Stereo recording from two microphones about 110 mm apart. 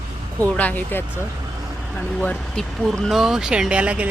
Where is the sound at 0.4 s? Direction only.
15° left (ahead or behind).